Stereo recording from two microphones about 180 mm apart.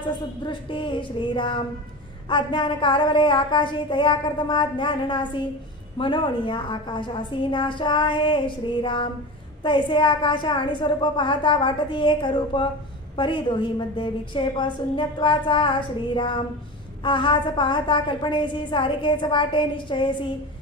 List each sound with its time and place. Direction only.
0.0 s a woman's voice: 25° left (ahead or behind)